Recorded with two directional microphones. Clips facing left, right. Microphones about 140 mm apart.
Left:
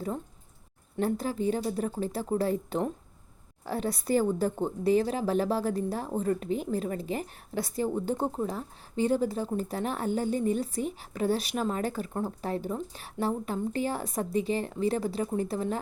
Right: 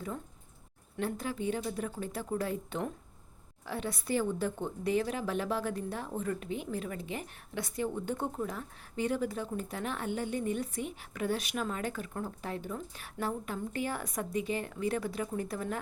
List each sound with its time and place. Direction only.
0.9 s a woman's voice: 35° left (ahead or behind)